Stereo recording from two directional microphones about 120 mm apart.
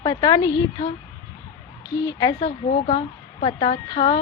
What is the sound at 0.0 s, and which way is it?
Speech, 35° left (ahead or behind).